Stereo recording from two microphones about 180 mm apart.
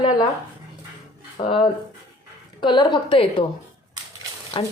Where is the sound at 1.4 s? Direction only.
30° left (ahead or behind).